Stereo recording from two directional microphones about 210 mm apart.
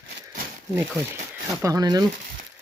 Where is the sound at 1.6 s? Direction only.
15° right (ahead or behind).